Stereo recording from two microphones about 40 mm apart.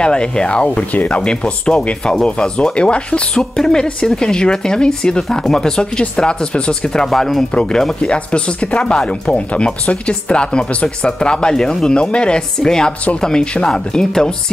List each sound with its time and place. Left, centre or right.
0.0 s speech: left
3.3 s a woman's voice: centre
7.1 s a woman's voice: centre
8.0 s speech: left
8.9 s a woman's voice: centre
9.3 s speech: left